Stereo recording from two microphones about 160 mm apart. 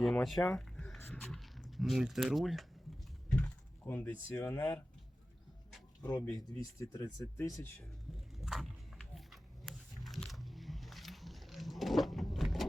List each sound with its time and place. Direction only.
0.0 s speech: centre (ahead or behind)
0.4 s a sound: 5° left (ahead or behind)
1.2 s speech: centre (ahead or behind)
3.3 s speech: 10° left (ahead or behind)
6.0 s speech: 15° left (ahead or behind)
8.4 s a sound: centre (ahead or behind)